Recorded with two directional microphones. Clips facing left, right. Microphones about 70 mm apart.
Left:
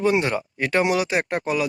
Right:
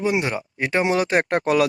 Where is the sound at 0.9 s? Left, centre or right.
Right.